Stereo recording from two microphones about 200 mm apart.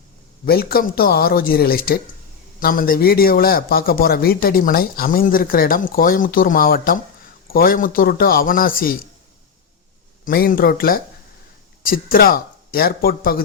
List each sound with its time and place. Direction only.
0.4 s a man's voice: 50° left (ahead or behind)
10.2 s a man's voice: 45° left (ahead or behind)